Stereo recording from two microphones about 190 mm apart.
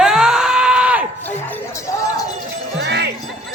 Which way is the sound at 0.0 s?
5° right (ahead or behind).